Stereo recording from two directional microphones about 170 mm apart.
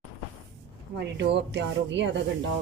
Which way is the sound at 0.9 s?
85° right.